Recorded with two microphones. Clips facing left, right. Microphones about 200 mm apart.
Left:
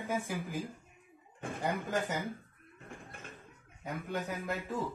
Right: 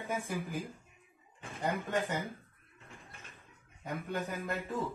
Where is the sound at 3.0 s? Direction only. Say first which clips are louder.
Left 6 dB; 50° left (ahead or behind).